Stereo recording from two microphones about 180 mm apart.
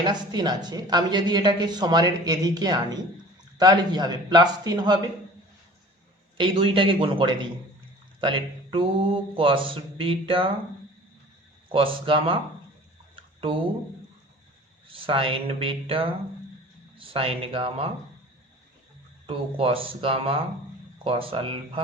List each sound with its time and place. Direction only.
0.0 s speech: 25° right (ahead or behind)
6.3 s speech: 25° right (ahead or behind)
11.7 s speech: 30° right (ahead or behind)
14.9 s speech: 30° right (ahead or behind)
19.3 s speech: 30° right (ahead or behind)